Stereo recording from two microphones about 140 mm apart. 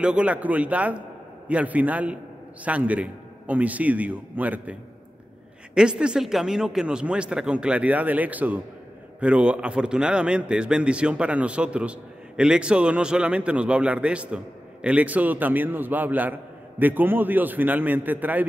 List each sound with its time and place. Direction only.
0.0 s a man's voice: 10° right (ahead or behind)
5.8 s a man's voice: 5° right (ahead or behind)